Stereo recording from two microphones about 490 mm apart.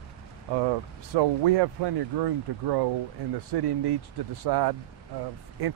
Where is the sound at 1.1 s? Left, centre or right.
Right.